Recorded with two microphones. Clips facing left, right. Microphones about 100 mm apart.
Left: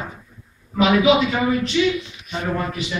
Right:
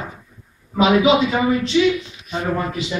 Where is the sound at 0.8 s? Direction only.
20° right (ahead or behind).